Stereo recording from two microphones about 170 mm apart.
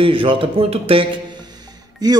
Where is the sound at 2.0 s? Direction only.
20° right (ahead or behind).